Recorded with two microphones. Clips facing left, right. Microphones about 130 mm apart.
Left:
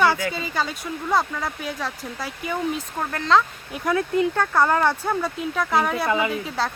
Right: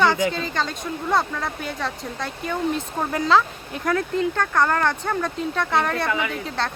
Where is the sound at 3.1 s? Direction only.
5° right (ahead or behind).